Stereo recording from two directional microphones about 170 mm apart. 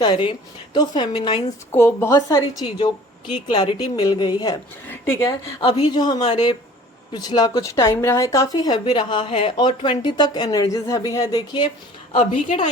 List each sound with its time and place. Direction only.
0.0 s speech: 30° left (ahead or behind)
1.7 s speech: 15° left (ahead or behind)
4.9 s a woman's voice: 15° left (ahead or behind)
5.6 s speech: 30° left (ahead or behind)
12.1 s a woman's voice: 45° left (ahead or behind)